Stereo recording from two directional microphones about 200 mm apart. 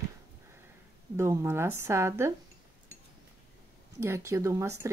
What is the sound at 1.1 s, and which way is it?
Speech, 15° right (ahead or behind).